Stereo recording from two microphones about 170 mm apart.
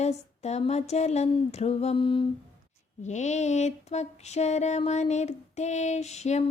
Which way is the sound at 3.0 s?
45° left (ahead or behind).